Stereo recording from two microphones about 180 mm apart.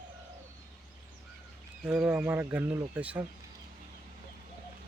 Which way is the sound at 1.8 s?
5° right (ahead or behind).